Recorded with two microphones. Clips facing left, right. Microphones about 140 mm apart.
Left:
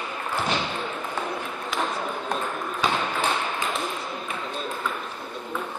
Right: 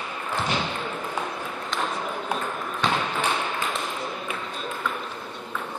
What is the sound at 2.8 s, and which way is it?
Basketball bounce, 5° left (ahead or behind).